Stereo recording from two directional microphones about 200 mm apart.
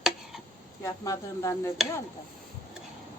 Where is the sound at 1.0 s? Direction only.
15° left (ahead or behind).